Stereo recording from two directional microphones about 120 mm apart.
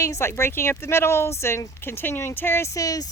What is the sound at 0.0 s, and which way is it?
A woman's voice, 25° left (ahead or behind).